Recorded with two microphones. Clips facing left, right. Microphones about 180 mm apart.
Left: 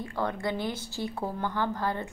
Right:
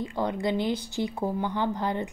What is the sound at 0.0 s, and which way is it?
A woman's voice, 15° right (ahead or behind).